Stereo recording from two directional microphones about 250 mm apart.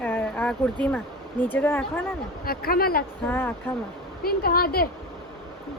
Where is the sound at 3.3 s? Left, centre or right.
Centre.